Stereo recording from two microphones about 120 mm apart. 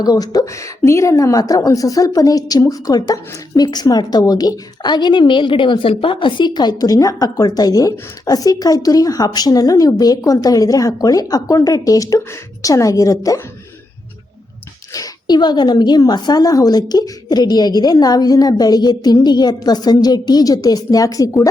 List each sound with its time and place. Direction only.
0.0 s a woman's voice: 30° left (ahead or behind)
14.9 s a woman's voice: 30° left (ahead or behind)